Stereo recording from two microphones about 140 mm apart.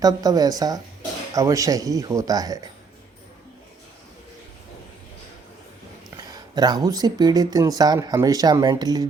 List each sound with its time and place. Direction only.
0.0 s speech: 25° right (ahead or behind)
6.1 s speech: 25° right (ahead or behind)